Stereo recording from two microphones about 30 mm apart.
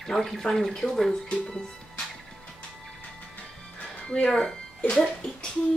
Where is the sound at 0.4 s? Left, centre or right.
Centre.